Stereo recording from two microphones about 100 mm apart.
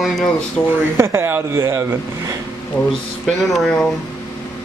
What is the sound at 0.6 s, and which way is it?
Speech, 55° left (ahead or behind).